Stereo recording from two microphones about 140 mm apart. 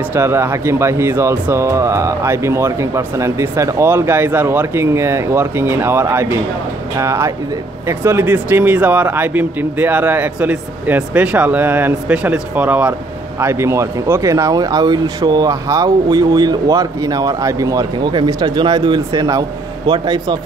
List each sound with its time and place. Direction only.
0.1 s speech: 15° right (ahead or behind)